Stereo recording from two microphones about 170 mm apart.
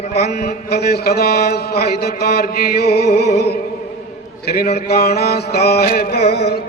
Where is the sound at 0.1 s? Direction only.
70° left (ahead or behind).